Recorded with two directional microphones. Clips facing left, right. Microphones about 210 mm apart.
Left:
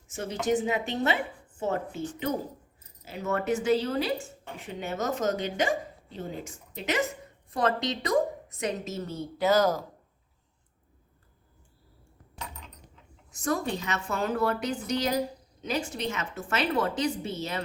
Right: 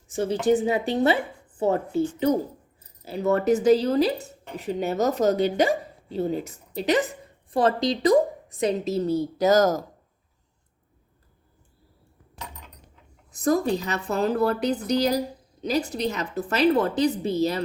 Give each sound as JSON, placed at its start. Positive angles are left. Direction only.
{"t": 0.1, "sound": "a woman's voice", "side_deg": -35}
{"t": 13.3, "sound": "speech", "side_deg": -35}